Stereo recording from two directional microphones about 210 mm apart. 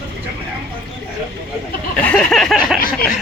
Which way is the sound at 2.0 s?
5° left (ahead or behind).